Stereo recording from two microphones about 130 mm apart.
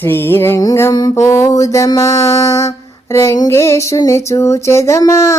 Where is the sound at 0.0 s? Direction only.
15° left (ahead or behind).